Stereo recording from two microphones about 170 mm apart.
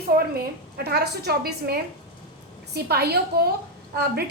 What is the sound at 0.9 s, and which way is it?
A woman's voice, 70° right (ahead or behind).